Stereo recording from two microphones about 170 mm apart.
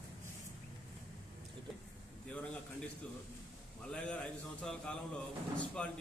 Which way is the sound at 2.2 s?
5° left (ahead or behind).